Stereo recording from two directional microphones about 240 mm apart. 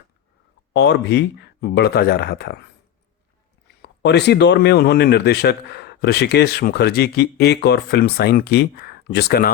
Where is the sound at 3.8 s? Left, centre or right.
Left.